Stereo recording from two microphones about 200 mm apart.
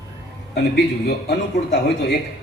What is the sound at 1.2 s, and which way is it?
Speech, 55° left (ahead or behind).